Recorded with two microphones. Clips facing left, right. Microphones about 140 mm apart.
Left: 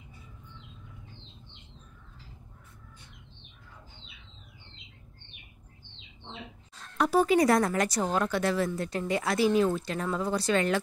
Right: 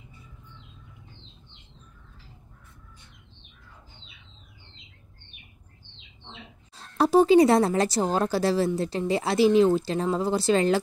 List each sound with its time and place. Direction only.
6.7 s speech: 30° right (ahead or behind)